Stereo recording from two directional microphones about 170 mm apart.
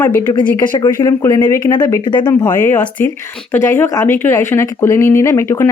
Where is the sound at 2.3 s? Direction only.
10° left (ahead or behind).